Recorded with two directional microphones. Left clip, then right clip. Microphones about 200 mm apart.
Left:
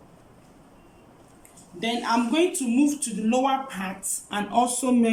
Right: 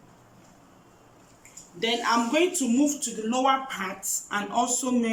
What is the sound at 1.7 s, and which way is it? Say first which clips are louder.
A man's voice: right 1 dB; 15° left (ahead or behind).